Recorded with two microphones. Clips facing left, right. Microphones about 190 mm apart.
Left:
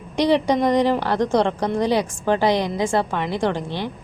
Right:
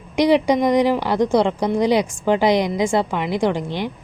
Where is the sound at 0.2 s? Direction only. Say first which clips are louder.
Right 2 dB; 10° right (ahead or behind).